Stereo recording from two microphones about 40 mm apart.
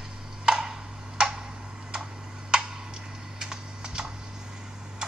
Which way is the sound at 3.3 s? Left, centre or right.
Centre.